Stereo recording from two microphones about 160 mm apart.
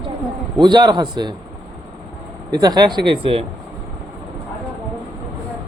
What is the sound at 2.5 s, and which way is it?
Speech, 25° right (ahead or behind).